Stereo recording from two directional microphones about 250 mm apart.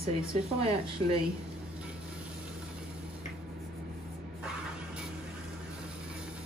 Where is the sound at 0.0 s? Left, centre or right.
Right.